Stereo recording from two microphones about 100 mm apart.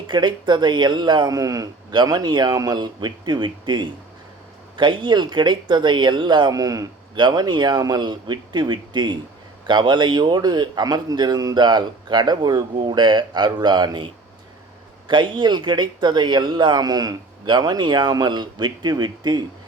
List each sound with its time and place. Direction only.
0.1 s speech: 50° right (ahead or behind)
1.9 s speech: 45° right (ahead or behind)